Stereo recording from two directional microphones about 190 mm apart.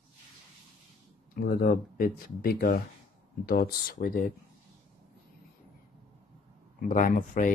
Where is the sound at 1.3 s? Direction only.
50° left (ahead or behind).